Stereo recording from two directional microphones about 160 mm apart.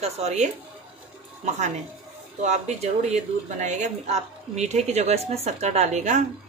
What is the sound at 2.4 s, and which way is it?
Speech, 45° right (ahead or behind).